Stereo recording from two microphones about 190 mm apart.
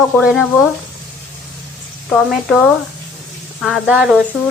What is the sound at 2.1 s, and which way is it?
Speech, centre (ahead or behind).